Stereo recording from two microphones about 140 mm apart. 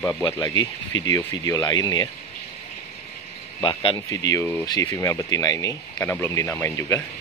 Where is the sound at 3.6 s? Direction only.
40° left (ahead or behind).